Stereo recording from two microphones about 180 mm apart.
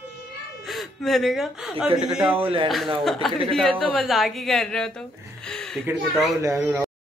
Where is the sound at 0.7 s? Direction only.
Centre (ahead or behind).